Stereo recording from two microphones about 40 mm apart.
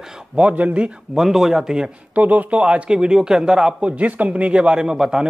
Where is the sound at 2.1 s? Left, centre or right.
Right.